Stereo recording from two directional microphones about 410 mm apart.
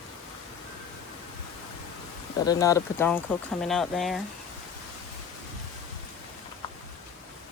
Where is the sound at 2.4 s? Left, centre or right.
Centre.